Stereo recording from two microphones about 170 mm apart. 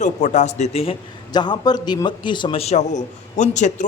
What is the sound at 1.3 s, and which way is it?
A man's voice, 25° left (ahead or behind).